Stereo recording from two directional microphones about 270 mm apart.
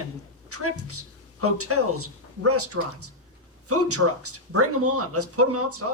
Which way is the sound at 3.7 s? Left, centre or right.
Right.